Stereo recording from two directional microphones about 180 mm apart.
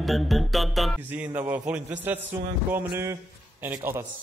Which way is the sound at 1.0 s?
10° right (ahead or behind).